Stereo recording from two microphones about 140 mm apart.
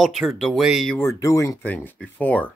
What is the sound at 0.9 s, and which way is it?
Speech, 20° left (ahead or behind).